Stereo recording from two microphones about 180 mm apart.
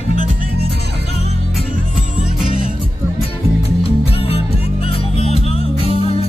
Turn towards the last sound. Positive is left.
turn(degrees=35)  # may be behind; listen again after turning